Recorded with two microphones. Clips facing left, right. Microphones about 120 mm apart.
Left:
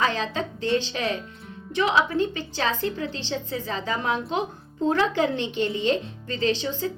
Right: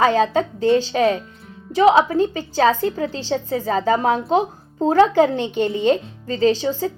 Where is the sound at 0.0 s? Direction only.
45° right (ahead or behind).